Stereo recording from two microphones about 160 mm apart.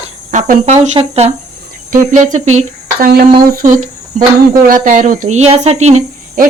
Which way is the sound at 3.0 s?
65° right (ahead or behind).